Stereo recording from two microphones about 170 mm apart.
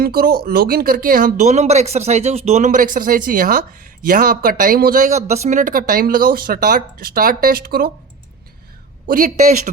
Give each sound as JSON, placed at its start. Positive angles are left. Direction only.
{"t": 0.0, "sound": "speech", "side_deg": -65}
{"t": 9.0, "sound": "speech", "side_deg": -50}